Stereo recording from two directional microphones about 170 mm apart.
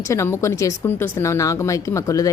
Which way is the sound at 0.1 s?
15° left (ahead or behind).